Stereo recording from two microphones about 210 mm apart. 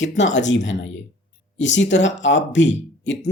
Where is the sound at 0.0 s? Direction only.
60° left (ahead or behind).